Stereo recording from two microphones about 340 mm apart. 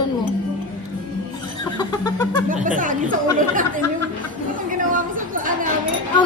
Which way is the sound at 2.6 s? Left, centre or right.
Right.